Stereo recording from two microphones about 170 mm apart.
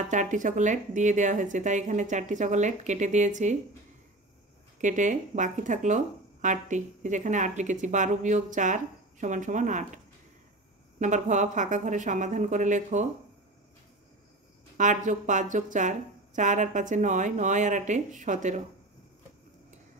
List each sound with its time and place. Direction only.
0.1 s speech: 50° right (ahead or behind)
4.7 s speech: 45° right (ahead or behind)
11.0 s speech: 45° right (ahead or behind)
14.8 s speech: 45° right (ahead or behind)